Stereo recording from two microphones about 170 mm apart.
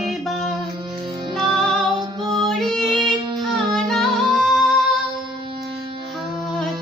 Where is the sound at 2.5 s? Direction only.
Centre (ahead or behind).